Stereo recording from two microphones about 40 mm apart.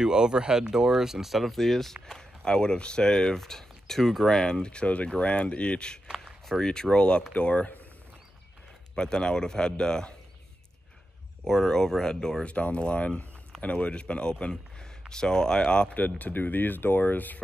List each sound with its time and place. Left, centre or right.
0.0 s speech: centre; by 4.8 s left
4.8 s speech: left
6.1 s speech: centre; by 7.7 s left
8.9 s speech: centre
11.4 s speech: centre
12.4 s speech: left
15.9 s speech: left